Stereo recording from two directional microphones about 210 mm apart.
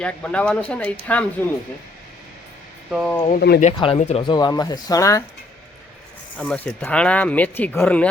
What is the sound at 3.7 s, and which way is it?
Speech, 25° left (ahead or behind).